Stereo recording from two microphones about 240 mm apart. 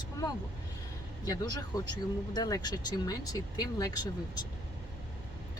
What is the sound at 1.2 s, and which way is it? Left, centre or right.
Speech, centre.